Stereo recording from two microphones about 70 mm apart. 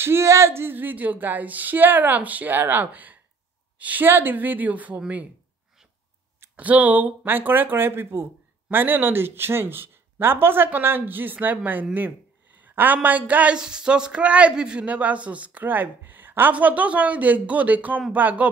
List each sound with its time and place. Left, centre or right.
0.0 s speech: right
6.5 s speech: right
13.6 s speech: centre